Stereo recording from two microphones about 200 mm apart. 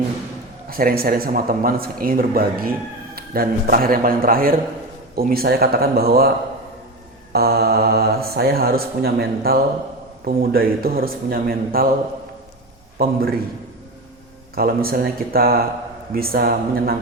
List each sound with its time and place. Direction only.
0.7 s speech: 45° right (ahead or behind)
7.3 s speech: 50° right (ahead or behind)
13.0 s speech: 50° right (ahead or behind)
14.5 s speech: 50° right (ahead or behind)